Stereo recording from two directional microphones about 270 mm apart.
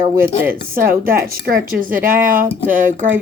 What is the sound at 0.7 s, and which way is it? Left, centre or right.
Speech, right.